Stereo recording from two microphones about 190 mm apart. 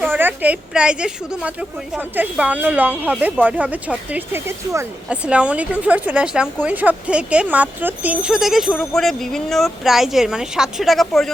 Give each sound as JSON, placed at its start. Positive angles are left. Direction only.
{"t": 0.0, "sound": "speech", "side_deg": -10}